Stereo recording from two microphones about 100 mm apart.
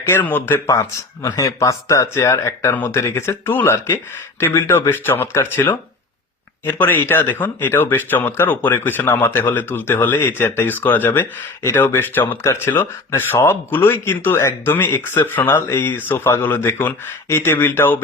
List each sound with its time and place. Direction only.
0.0 s speech: 20° left (ahead or behind)
0.7 s speech: 35° left (ahead or behind)
2.7 s speech: 20° left (ahead or behind)